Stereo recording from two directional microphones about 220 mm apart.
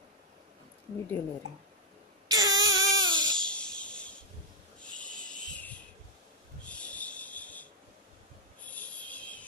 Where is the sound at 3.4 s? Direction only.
5° left (ahead or behind).